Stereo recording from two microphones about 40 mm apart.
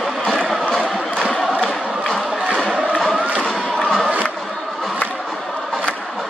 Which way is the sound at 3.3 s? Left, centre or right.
Centre.